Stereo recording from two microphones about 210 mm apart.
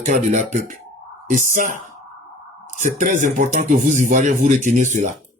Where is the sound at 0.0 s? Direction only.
35° right (ahead or behind).